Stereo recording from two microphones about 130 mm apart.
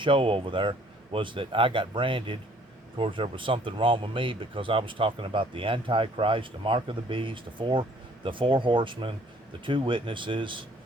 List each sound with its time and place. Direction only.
0.0 s speech: 40° right (ahead or behind)